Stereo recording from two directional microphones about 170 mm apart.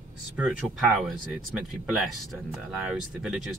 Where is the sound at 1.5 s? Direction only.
Centre (ahead or behind).